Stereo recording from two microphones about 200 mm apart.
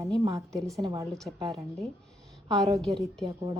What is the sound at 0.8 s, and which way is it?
Speech, 25° right (ahead or behind).